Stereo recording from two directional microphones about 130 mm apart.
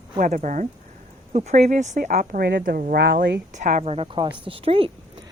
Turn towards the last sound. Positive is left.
turn(degrees=-45)  # may be behind; listen again after turning